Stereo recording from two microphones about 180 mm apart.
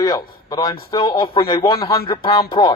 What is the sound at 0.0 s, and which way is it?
A man's voice, 20° left (ahead or behind).